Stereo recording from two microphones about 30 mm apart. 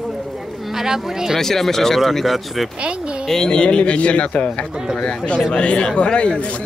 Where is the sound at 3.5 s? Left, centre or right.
Left.